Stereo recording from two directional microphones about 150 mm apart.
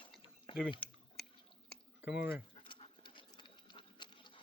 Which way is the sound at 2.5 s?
35° left (ahead or behind).